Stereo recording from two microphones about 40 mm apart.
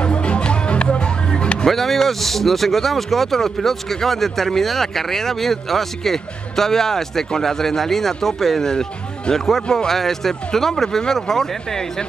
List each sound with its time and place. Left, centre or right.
0.0 s music: left
1.7 s speech: centre